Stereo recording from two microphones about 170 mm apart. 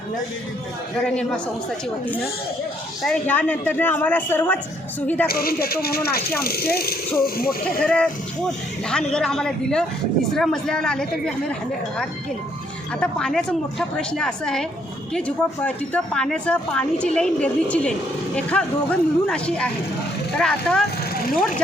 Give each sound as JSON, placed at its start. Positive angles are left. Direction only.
{"t": 0.9, "sound": "a woman's voice", "side_deg": 5}
{"t": 3.0, "sound": "a man's voice", "side_deg": 5}
{"t": 5.3, "sound": "speech", "side_deg": 65}
{"t": 7.9, "sound": "a man's voice", "side_deg": 5}
{"t": 13.0, "sound": "a woman's voice", "side_deg": 5}